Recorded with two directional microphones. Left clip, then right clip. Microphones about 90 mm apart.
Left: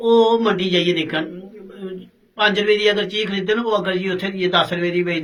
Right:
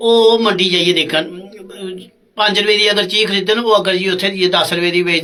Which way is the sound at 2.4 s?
35° right (ahead or behind).